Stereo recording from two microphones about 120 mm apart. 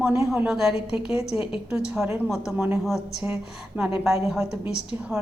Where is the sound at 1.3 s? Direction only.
20° right (ahead or behind); by 3.3 s centre (ahead or behind).